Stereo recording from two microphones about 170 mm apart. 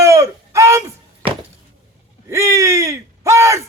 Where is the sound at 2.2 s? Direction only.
15° right (ahead or behind).